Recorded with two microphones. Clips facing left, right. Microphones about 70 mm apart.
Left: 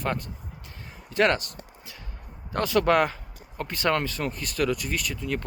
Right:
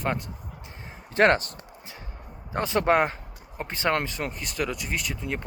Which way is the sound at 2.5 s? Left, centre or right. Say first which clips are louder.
Left 1 dB; right.